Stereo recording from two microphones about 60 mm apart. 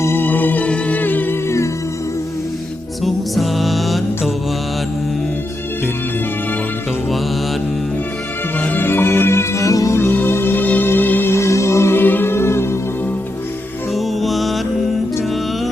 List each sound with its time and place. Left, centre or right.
0.2 s music: left
1.5 s music: left
3.0 s music: centre
8.6 s music: left
9.6 s music: left
10.0 s music: left
11.3 s music: left
12.0 s music: left
13.9 s music: centre